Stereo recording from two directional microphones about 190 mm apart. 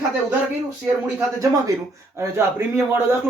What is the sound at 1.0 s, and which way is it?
Speech, 15° right (ahead or behind).